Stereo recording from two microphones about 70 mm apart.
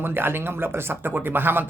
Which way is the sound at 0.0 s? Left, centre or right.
Right.